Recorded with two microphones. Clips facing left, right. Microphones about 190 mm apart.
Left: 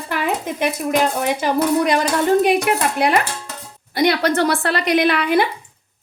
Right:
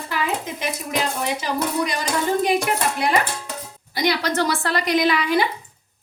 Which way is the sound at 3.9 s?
60° left (ahead or behind).